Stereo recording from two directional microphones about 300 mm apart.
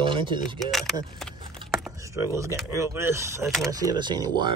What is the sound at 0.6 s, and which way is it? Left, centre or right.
Speech, centre.